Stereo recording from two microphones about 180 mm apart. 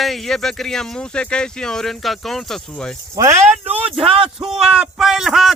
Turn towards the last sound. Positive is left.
turn(degrees=0)  # may be behind; listen again after turning